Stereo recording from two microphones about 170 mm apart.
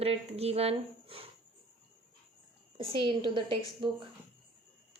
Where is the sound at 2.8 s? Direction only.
30° right (ahead or behind).